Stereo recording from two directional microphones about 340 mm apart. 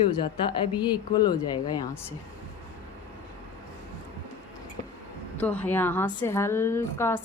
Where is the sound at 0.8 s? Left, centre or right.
Centre.